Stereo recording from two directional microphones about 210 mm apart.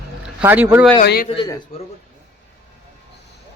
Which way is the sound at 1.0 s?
45° left (ahead or behind).